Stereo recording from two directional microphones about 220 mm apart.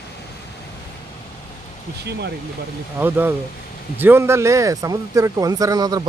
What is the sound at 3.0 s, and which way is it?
Speech, 10° right (ahead or behind).